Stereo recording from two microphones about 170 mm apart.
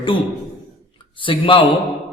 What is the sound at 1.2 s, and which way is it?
Speech, 30° left (ahead or behind).